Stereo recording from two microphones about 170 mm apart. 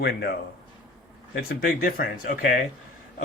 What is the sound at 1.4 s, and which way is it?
Speech, 60° left (ahead or behind).